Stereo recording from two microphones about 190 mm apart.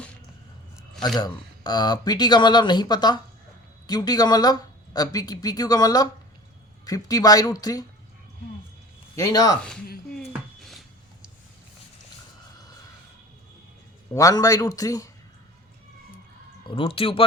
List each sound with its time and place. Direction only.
1.2 s speech: 20° left (ahead or behind)
9.1 s speech: 20° left (ahead or behind)
10.2 s a sound: centre (ahead or behind)
14.1 s speech: 20° left (ahead or behind)
16.6 s speech: 30° left (ahead or behind)